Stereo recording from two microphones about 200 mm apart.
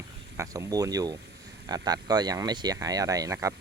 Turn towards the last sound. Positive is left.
turn(degrees=-15)  # may be behind; listen again after turning